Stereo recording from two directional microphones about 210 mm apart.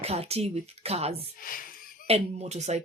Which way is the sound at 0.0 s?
30° right (ahead or behind).